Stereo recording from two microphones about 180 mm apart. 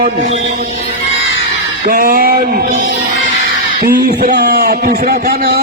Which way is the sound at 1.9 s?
55° right (ahead or behind).